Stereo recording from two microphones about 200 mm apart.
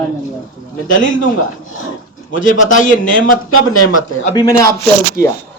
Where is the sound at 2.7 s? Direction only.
40° left (ahead or behind).